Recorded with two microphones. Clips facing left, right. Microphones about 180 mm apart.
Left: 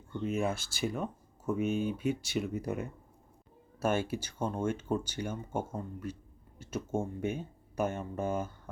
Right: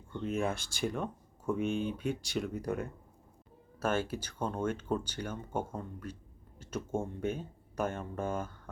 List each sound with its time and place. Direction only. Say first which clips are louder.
0.2 s speech: left 1 dB; 5° left (ahead or behind)